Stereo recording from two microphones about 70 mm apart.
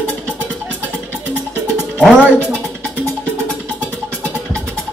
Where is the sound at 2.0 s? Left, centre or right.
Centre.